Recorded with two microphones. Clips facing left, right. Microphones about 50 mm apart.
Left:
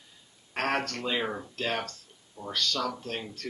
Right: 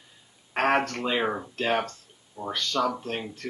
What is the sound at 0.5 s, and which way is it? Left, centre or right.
Speech, centre.